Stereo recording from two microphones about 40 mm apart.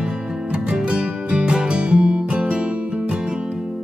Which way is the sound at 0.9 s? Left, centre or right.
Right.